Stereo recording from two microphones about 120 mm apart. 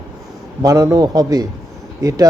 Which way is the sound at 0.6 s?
30° right (ahead or behind).